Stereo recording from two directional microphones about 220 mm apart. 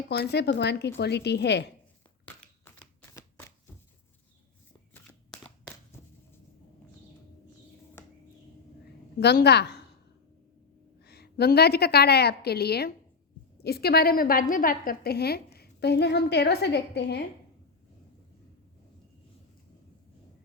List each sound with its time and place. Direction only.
0.1 s a woman's voice: 50° left (ahead or behind)
2.7 s shuffling cards: 10° left (ahead or behind)
5.0 s shuffling cards: 5° left (ahead or behind)
9.2 s a woman's voice: 50° left (ahead or behind)
11.0 s a woman's voice: 50° left (ahead or behind)